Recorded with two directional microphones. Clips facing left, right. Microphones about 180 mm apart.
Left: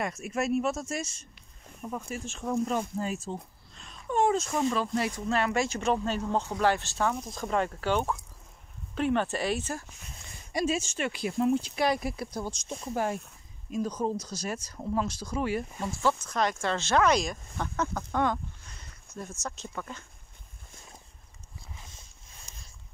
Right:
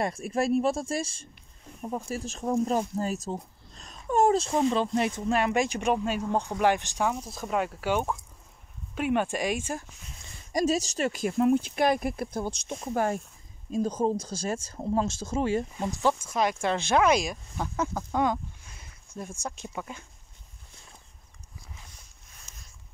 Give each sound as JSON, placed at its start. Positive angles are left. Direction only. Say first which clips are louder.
{"t": 0.0, "sound": "speech", "louder": "right 3 dB", "side_deg": -30}
{"t": 4.5, "sound": "speech", "louder": "right 3 dB", "side_deg": -25}
{"t": 10.5, "sound": "speech", "louder": "right 3 dB", "side_deg": -40}
{"t": 13.7, "sound": "speech", "louder": "right 4 dB", "side_deg": -30}